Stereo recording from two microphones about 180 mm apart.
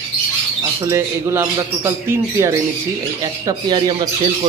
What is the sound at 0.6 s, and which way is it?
Speech, 15° right (ahead or behind).